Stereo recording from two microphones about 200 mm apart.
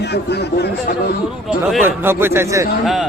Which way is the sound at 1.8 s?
10° right (ahead or behind).